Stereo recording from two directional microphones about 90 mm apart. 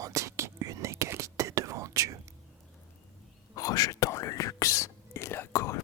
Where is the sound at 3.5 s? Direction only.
45° left (ahead or behind).